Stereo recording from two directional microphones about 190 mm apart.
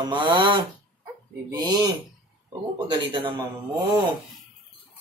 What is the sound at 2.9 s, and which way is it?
A man's voice, 25° right (ahead or behind).